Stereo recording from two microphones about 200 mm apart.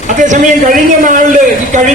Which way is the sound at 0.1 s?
40° right (ahead or behind).